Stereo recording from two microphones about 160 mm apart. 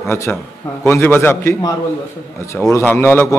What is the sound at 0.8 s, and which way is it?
Speech, 15° left (ahead or behind).